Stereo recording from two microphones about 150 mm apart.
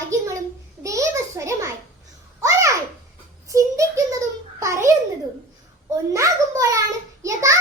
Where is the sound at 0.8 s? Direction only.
20° right (ahead or behind).